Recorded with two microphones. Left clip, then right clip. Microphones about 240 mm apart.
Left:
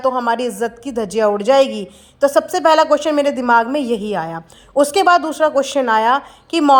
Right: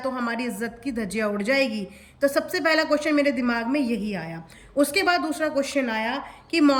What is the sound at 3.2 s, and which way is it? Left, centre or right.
Speech, left.